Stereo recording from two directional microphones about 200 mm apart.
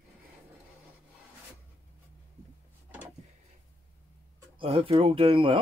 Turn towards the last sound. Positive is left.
turn(degrees=-25)  # may be behind; listen again after turning